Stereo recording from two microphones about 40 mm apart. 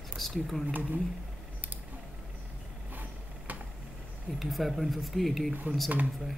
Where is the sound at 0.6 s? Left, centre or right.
Right.